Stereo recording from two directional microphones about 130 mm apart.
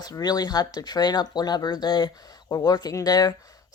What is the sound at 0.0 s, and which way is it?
Speech, 30° left (ahead or behind).